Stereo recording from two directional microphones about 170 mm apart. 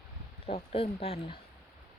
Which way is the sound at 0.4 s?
35° left (ahead or behind).